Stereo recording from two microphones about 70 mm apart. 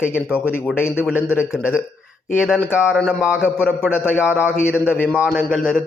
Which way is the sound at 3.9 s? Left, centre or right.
Left.